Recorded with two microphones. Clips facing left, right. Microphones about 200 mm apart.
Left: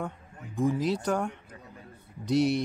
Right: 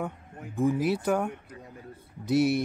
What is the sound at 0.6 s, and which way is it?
Speech, 5° right (ahead or behind).